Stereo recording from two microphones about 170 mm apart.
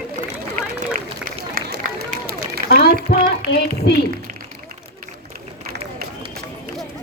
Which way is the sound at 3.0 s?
60° left (ahead or behind).